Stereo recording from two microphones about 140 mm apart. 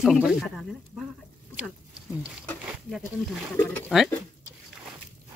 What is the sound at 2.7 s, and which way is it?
Speech, 5° right (ahead or behind).